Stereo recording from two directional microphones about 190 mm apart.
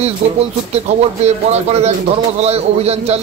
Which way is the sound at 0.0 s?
35° right (ahead or behind).